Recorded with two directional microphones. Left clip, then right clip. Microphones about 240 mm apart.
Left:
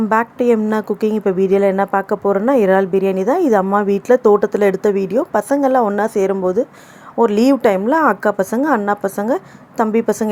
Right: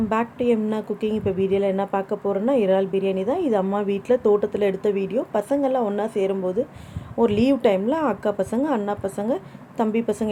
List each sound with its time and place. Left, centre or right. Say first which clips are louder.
0.1 s a woman's voice: left 8 dB; left